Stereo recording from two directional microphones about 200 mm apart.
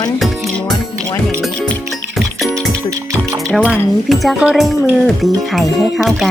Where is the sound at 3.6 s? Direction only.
Centre (ahead or behind).